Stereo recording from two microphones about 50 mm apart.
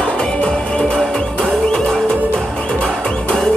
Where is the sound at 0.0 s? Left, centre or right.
Centre.